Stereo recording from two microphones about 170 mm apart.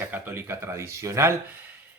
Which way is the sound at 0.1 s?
15° right (ahead or behind).